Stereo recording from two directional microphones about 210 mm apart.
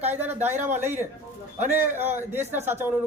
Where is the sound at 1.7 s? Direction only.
10° right (ahead or behind).